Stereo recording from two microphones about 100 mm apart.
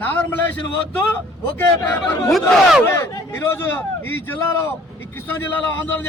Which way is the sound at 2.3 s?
Centre (ahead or behind).